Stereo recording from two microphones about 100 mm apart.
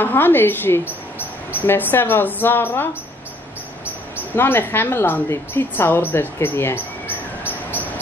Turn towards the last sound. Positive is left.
turn(degrees=25)  # may be behind; listen again after turning